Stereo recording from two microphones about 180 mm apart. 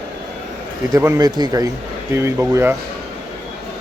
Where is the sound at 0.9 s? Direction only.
15° right (ahead or behind).